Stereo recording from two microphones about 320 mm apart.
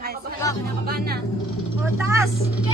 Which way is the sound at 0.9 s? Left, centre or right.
Right.